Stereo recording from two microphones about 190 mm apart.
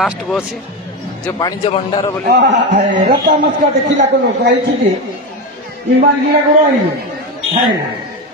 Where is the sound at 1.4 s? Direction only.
25° left (ahead or behind).